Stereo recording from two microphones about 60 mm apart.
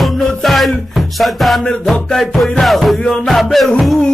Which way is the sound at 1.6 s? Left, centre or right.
Centre.